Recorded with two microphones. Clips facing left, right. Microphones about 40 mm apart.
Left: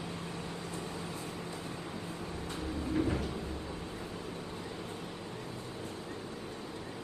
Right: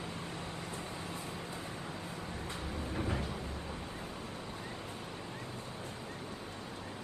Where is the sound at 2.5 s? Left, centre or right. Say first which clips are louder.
Left 7 dB; right.